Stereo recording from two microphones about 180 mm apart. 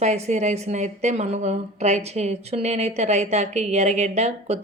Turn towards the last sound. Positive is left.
turn(degrees=-40)  # may be behind; listen again after turning